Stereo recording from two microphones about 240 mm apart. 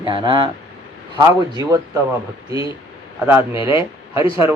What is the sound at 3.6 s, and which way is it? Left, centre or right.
Speech, centre.